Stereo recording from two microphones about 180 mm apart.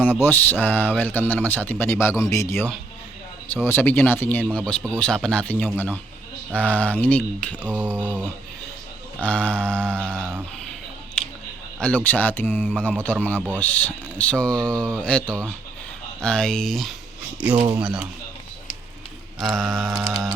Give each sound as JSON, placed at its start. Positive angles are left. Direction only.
{"t": 0.0, "sound": "speech", "side_deg": 10}
{"t": 7.6, "sound": "a sound", "side_deg": -10}
{"t": 9.2, "sound": "speech", "side_deg": 5}
{"t": 11.2, "sound": "a sound", "side_deg": 5}
{"t": 11.8, "sound": "speech", "side_deg": 5}
{"t": 19.4, "sound": "speech", "side_deg": 0}
{"t": 19.9, "sound": "music", "side_deg": -20}